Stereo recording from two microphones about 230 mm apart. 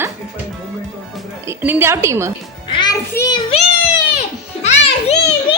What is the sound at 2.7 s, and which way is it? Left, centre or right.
Music, centre.